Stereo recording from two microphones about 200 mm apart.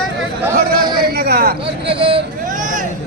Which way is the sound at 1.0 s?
55° right (ahead or behind).